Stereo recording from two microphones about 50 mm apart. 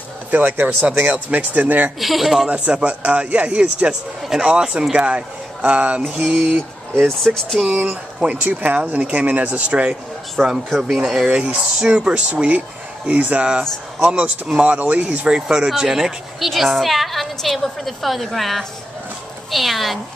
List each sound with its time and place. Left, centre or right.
0.3 s speech: right
1.0 s speech: right
2.0 s a man's voice: centre
2.4 s speech: right
7.1 s speech: centre
7.7 s speech: right
10.4 s a man's voice: centre
11.3 s speech: right
13.5 s a man's voice: centre